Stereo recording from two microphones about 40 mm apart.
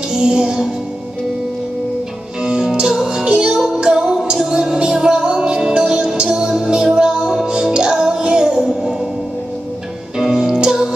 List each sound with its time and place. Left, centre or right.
0.1 s music: centre
2.4 s music: right
10.1 s music: centre